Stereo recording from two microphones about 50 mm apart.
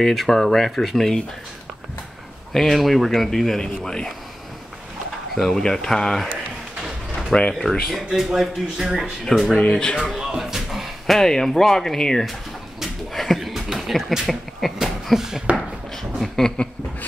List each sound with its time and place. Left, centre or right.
0.0 s speech: centre
2.5 s speech: centre
5.3 s speech: centre
7.3 s speech: centre
7.9 s speech: centre
9.2 s speech: centre
9.6 s speech: left
9.9 s music: centre
11.1 s speech: centre
12.8 s a sound: centre
14.2 s speech: centre
16.0 s a sound: centre